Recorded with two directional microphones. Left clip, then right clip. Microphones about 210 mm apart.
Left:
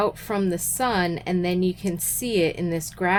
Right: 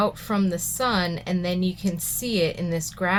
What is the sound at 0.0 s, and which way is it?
Speech, 40° left (ahead or behind).